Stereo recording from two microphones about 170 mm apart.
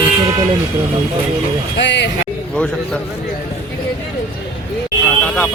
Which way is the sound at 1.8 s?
90° left.